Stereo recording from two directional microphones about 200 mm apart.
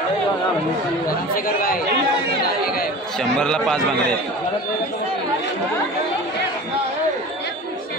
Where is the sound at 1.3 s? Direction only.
45° left (ahead or behind).